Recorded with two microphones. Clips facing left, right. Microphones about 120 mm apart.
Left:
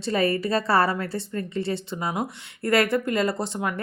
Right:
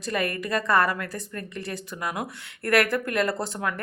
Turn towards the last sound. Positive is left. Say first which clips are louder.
# left 1 dB
turn(degrees=20)  # may be behind; listen again after turning